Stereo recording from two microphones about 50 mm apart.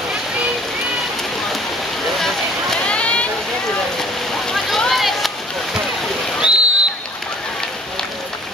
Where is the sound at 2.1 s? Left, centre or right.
Centre.